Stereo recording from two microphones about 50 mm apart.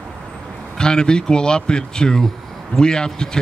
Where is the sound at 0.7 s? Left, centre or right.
Centre.